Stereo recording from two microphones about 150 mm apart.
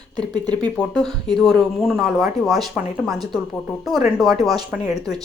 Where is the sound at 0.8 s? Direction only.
5° left (ahead or behind).